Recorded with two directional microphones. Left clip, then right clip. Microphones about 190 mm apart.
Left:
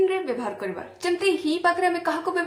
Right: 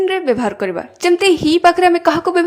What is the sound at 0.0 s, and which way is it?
A woman's voice, 45° right (ahead or behind).